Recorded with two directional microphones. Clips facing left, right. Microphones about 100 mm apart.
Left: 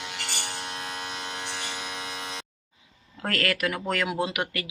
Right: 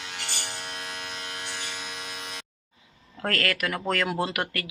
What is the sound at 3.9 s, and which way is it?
Speech, 5° left (ahead or behind).